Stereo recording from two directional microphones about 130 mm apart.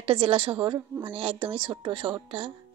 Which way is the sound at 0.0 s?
45° right (ahead or behind).